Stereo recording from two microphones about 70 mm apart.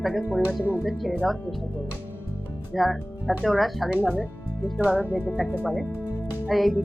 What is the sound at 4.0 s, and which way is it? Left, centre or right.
Speech, right.